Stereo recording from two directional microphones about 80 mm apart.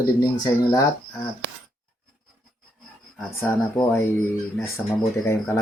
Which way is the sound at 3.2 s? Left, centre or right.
Left.